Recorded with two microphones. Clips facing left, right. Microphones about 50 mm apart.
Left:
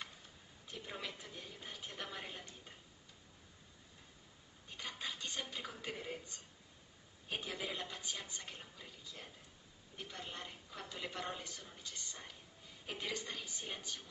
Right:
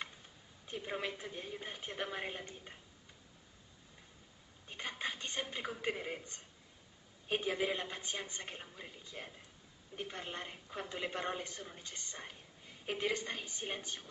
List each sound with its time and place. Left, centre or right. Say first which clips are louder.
0.7 s a woman's voice: right 6 dB; right
4.6 s a man's voice: right 4 dB; right